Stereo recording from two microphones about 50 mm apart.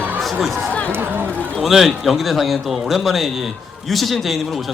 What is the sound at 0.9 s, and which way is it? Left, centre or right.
Speech, right.